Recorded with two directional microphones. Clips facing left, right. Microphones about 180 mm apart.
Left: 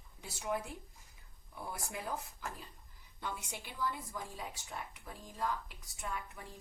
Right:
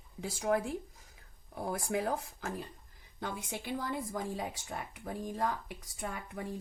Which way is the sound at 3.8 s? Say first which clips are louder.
Right 1 dB; 90° right.